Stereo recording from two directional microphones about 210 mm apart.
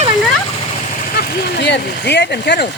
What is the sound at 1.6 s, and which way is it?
Speech, 55° left (ahead or behind).